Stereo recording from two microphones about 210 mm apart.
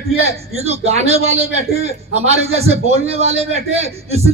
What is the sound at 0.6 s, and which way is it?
A man's voice, 30° right (ahead or behind).